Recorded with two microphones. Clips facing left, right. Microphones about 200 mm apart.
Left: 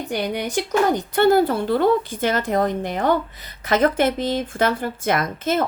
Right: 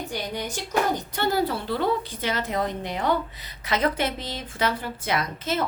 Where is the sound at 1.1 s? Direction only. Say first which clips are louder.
Left 11 dB; 50° left (ahead or behind).